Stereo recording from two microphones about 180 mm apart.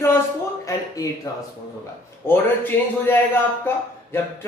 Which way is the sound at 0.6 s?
20° left (ahead or behind).